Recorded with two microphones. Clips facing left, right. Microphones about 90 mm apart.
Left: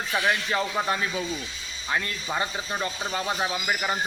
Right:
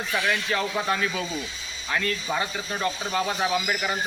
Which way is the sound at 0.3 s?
20° left (ahead or behind).